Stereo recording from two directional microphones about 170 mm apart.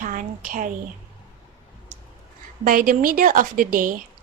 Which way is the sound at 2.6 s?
55° right (ahead or behind).